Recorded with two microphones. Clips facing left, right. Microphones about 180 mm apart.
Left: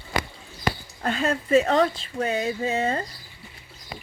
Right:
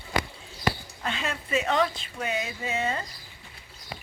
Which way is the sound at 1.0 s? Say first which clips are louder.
Left 7 dB; 45° left (ahead or behind).